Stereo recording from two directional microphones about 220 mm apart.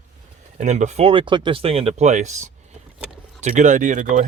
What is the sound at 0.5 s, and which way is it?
Speech, 30° right (ahead or behind).